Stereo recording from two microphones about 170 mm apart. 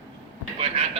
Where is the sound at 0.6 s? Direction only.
35° right (ahead or behind).